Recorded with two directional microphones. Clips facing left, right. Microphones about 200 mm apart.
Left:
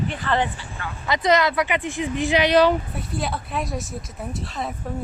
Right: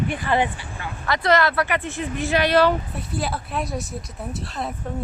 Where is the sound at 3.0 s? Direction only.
Centre (ahead or behind).